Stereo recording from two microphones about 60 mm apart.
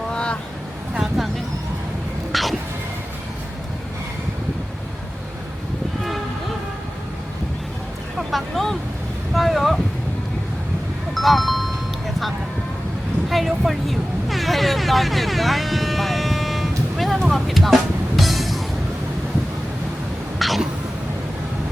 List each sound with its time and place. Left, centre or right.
0.1 s vehicle: centre
1.2 s vehicle: centre
2.3 s music: centre
8.3 s vehicle: centre
9.3 s boat: centre
11.1 s music: centre
13.3 s a sound: centre
18.2 s music: centre
20.4 s throat clearing: centre